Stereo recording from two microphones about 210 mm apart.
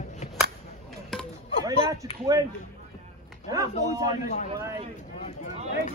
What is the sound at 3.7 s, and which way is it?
Speech, 30° left (ahead or behind).